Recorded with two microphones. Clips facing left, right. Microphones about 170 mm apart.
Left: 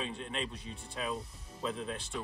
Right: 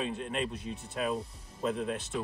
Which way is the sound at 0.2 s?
50° right (ahead or behind).